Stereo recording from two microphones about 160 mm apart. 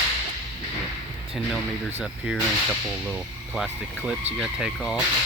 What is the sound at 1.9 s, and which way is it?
Speech, 10° right (ahead or behind).